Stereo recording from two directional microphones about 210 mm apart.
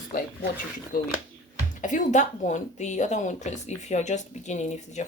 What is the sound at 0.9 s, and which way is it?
Speech, 45° left (ahead or behind).